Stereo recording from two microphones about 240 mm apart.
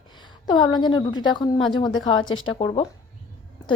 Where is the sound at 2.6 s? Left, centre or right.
Left.